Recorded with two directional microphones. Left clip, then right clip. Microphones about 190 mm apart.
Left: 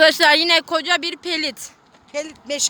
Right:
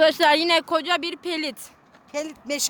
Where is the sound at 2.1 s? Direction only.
50° right (ahead or behind).